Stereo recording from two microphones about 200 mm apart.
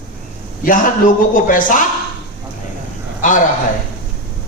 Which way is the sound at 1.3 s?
40° left (ahead or behind).